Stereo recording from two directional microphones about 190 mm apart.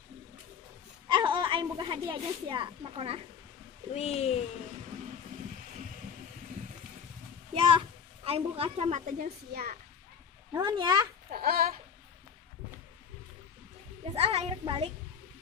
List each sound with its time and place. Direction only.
1.0 s a woman's voice: 25° right (ahead or behind)
3.9 s speech: 35° left (ahead or behind)
7.5 s a child's voice: 25° right (ahead or behind); by 9.7 s 50° right (ahead or behind)
10.5 s speech: 20° right (ahead or behind)
11.3 s a sound: 50° right (ahead or behind)
14.0 s a sound: 30° right (ahead or behind)